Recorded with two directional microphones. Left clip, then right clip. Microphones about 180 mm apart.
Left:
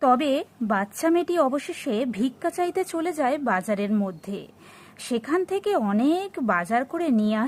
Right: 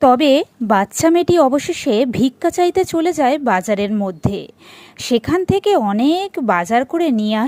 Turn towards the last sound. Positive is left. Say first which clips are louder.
# right 7 dB
turn(degrees=-25)  # may be behind; listen again after turning